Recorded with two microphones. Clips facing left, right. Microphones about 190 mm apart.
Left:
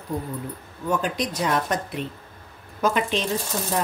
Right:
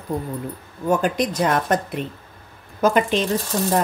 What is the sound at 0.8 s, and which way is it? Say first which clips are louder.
Speech: right 5 dB; 50° right (ahead or behind).